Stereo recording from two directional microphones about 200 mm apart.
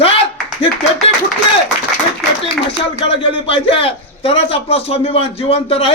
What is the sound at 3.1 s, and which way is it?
A man's voice, 25° left (ahead or behind).